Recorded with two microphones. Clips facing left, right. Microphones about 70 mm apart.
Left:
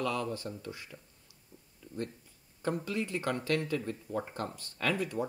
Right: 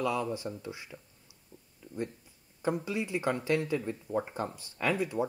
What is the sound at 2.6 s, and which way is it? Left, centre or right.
Speech, centre.